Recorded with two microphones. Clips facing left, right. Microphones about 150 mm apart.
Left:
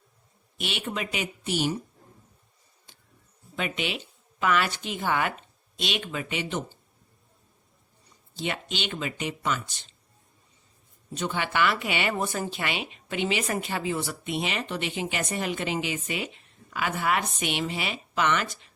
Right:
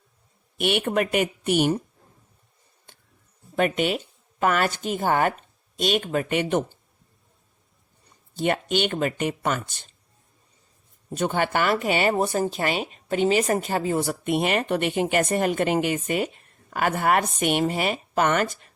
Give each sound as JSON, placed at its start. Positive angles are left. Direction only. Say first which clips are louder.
{"t": 0.5, "sound": "speech", "louder": "right 10 dB", "side_deg": -55}
{"t": 2.9, "sound": "a sound", "louder": "right 4 dB", "side_deg": -55}
{"t": 3.5, "sound": "speech", "louder": "right 8 dB", "side_deg": -50}
{"t": 8.4, "sound": "speech", "louder": "right 9 dB", "side_deg": -50}
{"t": 11.1, "sound": "speech", "louder": "right 6 dB", "side_deg": -50}